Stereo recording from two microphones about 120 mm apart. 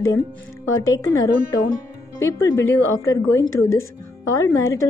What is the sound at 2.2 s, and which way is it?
A woman's voice, 25° left (ahead or behind).